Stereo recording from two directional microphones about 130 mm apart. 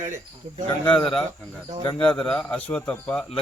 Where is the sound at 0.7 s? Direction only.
40° left (ahead or behind).